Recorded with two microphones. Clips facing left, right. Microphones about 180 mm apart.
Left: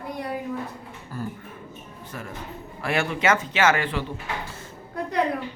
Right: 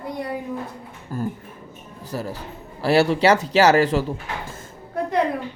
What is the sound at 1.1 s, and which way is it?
A man's voice, 45° right (ahead or behind).